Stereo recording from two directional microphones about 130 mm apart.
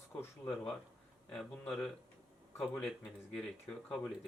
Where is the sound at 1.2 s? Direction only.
5° left (ahead or behind).